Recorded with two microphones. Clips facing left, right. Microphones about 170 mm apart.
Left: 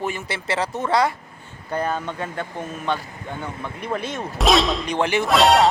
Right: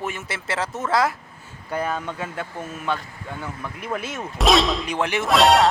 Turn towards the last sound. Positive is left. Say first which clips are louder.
# left 1 dB
turn(degrees=0)  # may be behind; listen again after turning